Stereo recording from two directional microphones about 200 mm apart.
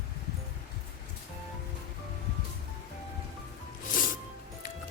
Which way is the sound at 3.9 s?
40° left (ahead or behind).